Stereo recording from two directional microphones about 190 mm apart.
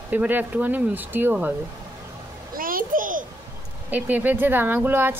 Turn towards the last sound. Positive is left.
turn(degrees=-10)  # may be behind; listen again after turning